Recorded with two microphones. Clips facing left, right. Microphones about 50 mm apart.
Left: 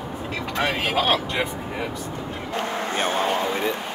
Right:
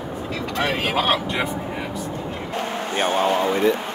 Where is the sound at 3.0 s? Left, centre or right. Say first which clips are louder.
Right 4 dB; right.